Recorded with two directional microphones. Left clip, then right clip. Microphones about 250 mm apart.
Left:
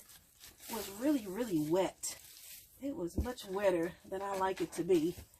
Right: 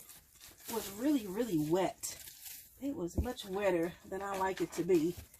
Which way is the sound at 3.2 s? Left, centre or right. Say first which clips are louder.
Left 1 dB; centre.